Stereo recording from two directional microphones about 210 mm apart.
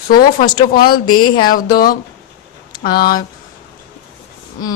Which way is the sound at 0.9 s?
20° left (ahead or behind).